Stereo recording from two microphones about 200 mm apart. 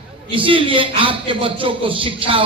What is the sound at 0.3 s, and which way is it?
A man's voice, 25° right (ahead or behind).